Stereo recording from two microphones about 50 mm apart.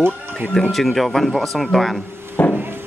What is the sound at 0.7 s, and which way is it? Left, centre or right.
Speech, centre.